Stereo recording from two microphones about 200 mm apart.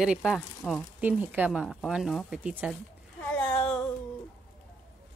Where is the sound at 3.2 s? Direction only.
10° left (ahead or behind).